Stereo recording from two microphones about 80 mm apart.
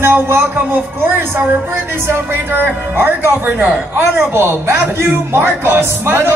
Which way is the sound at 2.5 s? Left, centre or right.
Right.